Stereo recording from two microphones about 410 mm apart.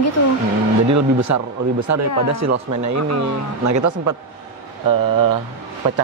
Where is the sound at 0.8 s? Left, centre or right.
Right.